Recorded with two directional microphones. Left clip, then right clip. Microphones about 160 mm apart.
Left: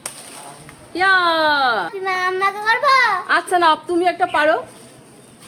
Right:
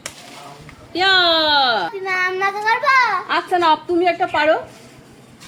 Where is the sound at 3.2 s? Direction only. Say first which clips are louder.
Left 1 dB; 25° left (ahead or behind).